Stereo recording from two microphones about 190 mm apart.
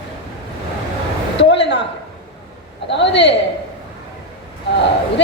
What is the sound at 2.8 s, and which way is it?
Speech, 65° left (ahead or behind).